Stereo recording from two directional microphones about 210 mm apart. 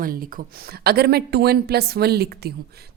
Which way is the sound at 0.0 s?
40° right (ahead or behind).